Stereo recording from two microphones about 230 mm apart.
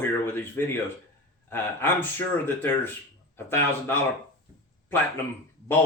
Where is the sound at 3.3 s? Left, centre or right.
Centre.